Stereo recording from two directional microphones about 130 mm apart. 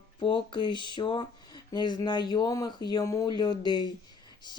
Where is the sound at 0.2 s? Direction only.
40° left (ahead or behind).